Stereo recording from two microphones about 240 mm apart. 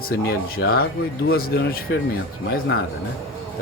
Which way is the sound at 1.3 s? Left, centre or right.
Left.